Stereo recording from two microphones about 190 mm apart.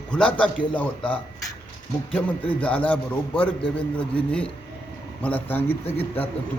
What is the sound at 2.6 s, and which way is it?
A man's voice, 5° left (ahead or behind).